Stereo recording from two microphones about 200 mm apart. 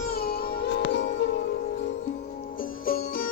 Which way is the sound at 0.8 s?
60° left (ahead or behind).